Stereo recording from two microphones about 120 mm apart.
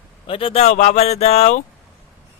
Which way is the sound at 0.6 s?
70° left (ahead or behind).